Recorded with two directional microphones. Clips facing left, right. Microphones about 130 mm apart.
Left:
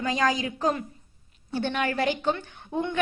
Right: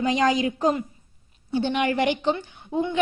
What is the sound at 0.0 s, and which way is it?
A woman's voice, 25° right (ahead or behind).